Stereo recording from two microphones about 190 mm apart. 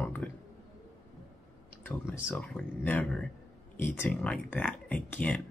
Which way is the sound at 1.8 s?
10° left (ahead or behind).